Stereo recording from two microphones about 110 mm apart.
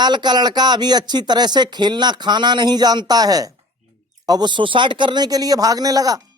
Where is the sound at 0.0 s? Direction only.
40° right (ahead or behind).